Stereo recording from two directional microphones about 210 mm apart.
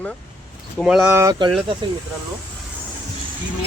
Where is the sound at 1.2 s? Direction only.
20° right (ahead or behind).